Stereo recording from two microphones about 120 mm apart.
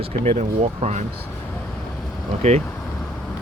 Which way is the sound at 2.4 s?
65° right (ahead or behind).